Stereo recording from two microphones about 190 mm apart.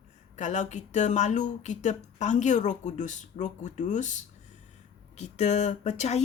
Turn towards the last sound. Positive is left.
turn(degrees=35)  # may be behind; listen again after turning